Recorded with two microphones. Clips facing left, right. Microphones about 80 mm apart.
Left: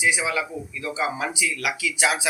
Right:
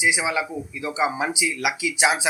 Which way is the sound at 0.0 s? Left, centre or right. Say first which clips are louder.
Right 1 dB; centre.